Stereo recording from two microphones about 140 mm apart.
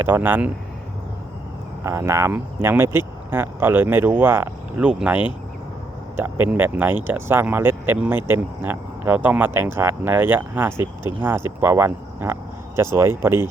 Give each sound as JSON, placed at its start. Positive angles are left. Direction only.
{"t": 0.0, "sound": "speech", "side_deg": -15}
{"t": 1.8, "sound": "speech", "side_deg": -20}